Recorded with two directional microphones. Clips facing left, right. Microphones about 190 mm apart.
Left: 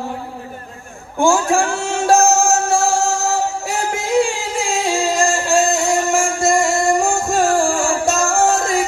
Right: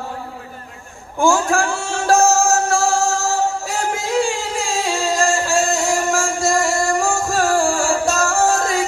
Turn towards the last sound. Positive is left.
turn(degrees=20)  # may be behind; listen again after turning